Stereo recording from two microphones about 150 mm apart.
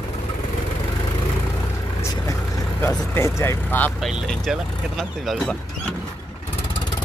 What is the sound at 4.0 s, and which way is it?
Speech, centre (ahead or behind).